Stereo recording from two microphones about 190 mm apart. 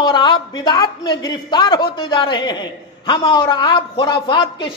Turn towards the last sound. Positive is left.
turn(degrees=25)  # may be behind; listen again after turning